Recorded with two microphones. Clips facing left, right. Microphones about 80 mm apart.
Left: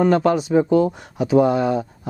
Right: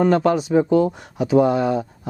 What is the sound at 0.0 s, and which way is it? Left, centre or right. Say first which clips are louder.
Speech: even; centre.